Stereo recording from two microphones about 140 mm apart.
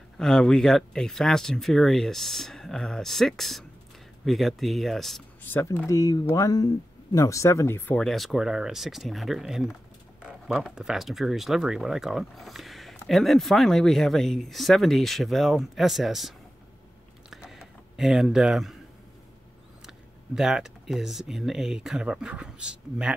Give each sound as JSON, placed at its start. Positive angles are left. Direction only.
{"t": 0.2, "sound": "speech", "side_deg": 5}
{"t": 5.4, "sound": "speech", "side_deg": 15}
{"t": 8.0, "sound": "speech", "side_deg": 0}
{"t": 17.3, "sound": "a sound", "side_deg": 0}
{"t": 19.9, "sound": "speech", "side_deg": -5}